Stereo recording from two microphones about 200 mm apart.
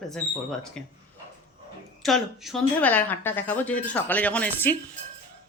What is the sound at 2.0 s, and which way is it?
Speech, centre (ahead or behind).